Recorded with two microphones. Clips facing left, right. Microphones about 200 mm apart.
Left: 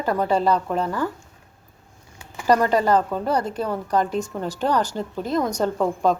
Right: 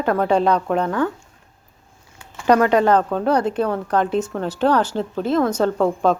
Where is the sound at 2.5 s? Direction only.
70° right (ahead or behind).